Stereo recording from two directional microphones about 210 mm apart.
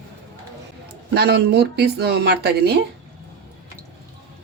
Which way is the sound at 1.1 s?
50° right (ahead or behind).